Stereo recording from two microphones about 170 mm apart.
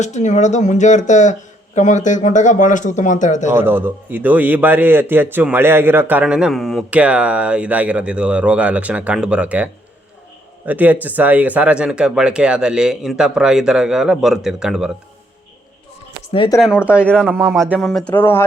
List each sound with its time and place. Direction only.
0.0 s speech: 45° left (ahead or behind)
3.5 s a man's voice: 10° right (ahead or behind)
10.7 s a man's voice: 10° right (ahead or behind)
16.6 s speech: 5° right (ahead or behind)
17.1 s speech: 5° left (ahead or behind)